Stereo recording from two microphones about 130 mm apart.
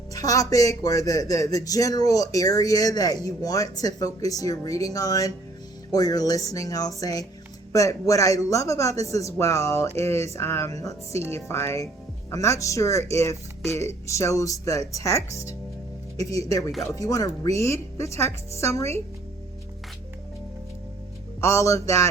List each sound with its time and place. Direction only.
0.1 s speech: 25° left (ahead or behind)
21.4 s speech: 25° left (ahead or behind)